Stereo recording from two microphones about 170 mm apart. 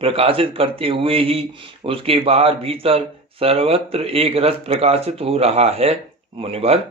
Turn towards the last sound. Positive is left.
turn(degrees=-35)  # may be behind; listen again after turning